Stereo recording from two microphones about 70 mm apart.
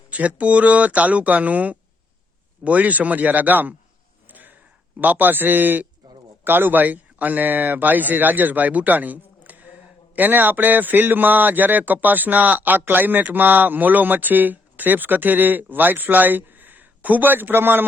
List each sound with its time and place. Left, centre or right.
0.1 s a man's voice: right
4.3 s a sound: right
6.4 s a man's voice: right